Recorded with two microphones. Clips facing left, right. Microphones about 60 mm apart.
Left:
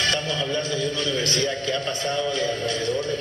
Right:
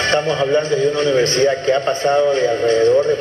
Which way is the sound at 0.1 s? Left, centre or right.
Right.